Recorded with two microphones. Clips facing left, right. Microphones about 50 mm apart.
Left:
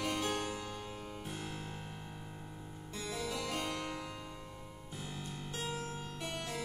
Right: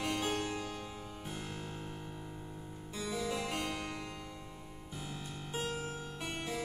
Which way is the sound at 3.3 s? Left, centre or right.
Centre.